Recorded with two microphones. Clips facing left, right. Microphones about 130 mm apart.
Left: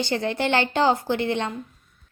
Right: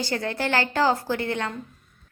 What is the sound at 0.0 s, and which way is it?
A woman's voice, 20° left (ahead or behind).